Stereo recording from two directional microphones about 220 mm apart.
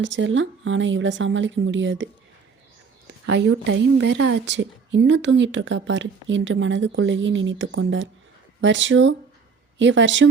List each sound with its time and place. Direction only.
0.0 s a woman's voice: 55° right (ahead or behind)
3.2 s a woman's voice: 55° right (ahead or behind)